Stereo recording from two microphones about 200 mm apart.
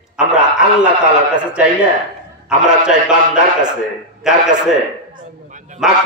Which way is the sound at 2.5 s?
5° right (ahead or behind).